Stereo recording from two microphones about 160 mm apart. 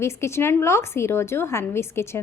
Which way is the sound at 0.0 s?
15° left (ahead or behind).